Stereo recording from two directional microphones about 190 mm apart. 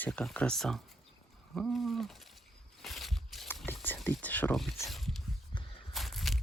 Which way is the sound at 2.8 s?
Centre (ahead or behind).